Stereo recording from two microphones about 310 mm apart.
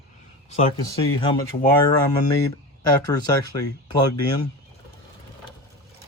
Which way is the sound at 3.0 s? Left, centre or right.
Centre.